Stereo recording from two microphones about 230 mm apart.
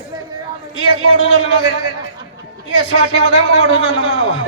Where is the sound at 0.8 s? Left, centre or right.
Right.